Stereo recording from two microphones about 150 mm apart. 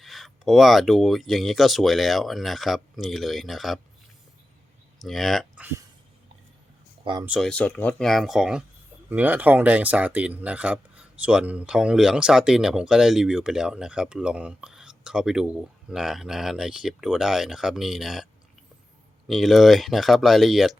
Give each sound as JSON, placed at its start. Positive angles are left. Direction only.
{"t": 0.0, "sound": "speech", "side_deg": 0}
{"t": 5.0, "sound": "speech", "side_deg": 0}
{"t": 7.0, "sound": "speech", "side_deg": -30}
{"t": 7.3, "sound": "speech", "side_deg": 0}
{"t": 19.3, "sound": "speech", "side_deg": 0}